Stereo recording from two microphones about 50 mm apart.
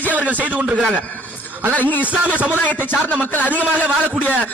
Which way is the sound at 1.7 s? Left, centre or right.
Left.